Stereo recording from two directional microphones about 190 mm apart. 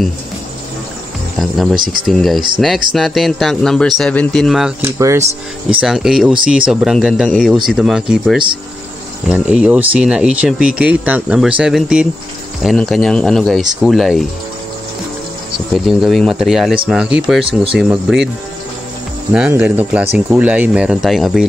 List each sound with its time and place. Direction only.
1.4 s speech: centre (ahead or behind)
4.9 s speech: 15° right (ahead or behind)
5.8 s speech: 5° right (ahead or behind)
15.7 s speech: centre (ahead or behind)
19.3 s speech: 5° right (ahead or behind)